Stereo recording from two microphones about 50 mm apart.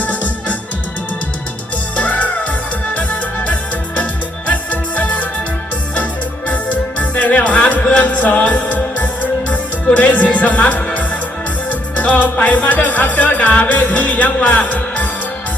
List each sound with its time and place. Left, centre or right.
0.0 s music: left
2.0 s music: left
6.5 s music: left
9.8 s speech: left
11.7 s music: left
14.4 s speech: left